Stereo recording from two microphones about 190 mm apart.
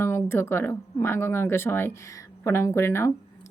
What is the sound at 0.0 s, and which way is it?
Speech, 15° left (ahead or behind).